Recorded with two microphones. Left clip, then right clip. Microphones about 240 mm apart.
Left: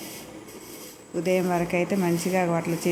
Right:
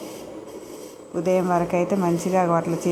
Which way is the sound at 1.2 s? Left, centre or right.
Centre.